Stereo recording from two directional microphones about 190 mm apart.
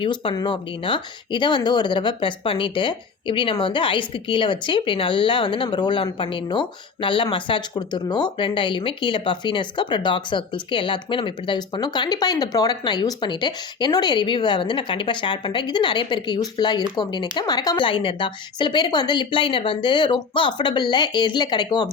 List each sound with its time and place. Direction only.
0.0 s speech: 25° left (ahead or behind)